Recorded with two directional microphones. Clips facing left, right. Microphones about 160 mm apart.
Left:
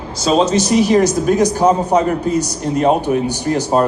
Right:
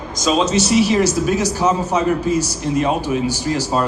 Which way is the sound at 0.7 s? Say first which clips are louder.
Left 2 dB; 55° left (ahead or behind).